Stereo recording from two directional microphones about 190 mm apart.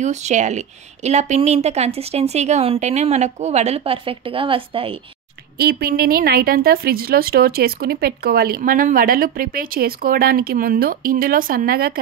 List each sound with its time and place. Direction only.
0.0 s a woman's voice: 35° right (ahead or behind)
5.6 s a woman's voice: 50° right (ahead or behind)